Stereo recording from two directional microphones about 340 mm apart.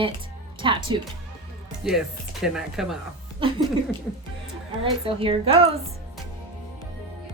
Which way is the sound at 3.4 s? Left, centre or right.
Centre.